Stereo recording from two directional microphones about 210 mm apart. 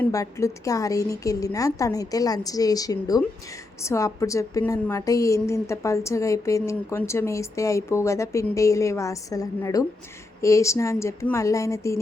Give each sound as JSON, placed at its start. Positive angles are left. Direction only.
{"t": 0.0, "sound": "a woman's voice", "side_deg": 15}